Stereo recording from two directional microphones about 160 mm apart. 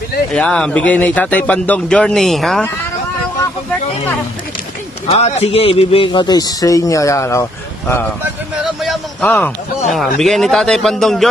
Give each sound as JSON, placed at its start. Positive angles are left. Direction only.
{"t": 0.3, "sound": "a man's voice", "side_deg": 5}
{"t": 5.0, "sound": "a man's voice", "side_deg": 40}
{"t": 8.8, "sound": "a man's voice", "side_deg": 5}